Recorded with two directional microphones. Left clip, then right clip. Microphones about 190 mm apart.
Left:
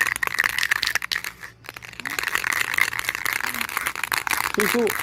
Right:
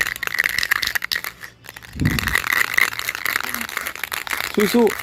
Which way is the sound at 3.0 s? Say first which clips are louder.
Right 2 dB; 10° right (ahead or behind).